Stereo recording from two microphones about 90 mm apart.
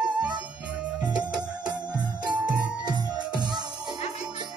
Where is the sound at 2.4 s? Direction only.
50° right (ahead or behind).